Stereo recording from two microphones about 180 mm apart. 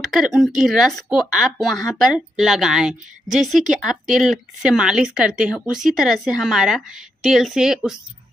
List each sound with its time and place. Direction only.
0.0 s speech: centre (ahead or behind)